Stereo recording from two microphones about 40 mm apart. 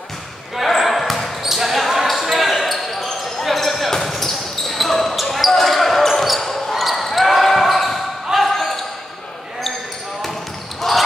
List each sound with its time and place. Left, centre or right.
0.6 s basketball bounce: centre
1.4 s a sound: centre
1.9 s basketball bounce: centre
10.8 s basketball bounce: centre